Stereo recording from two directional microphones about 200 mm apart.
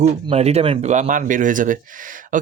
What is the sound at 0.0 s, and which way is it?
Speech, 30° right (ahead or behind).